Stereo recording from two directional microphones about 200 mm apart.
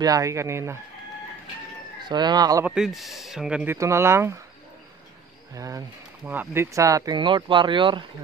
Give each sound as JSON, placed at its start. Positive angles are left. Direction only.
{"t": 0.0, "sound": "speech", "side_deg": -15}
{"t": 2.0, "sound": "speech", "side_deg": -20}
{"t": 2.6, "sound": "speech", "side_deg": -5}
{"t": 5.5, "sound": "speech", "side_deg": -15}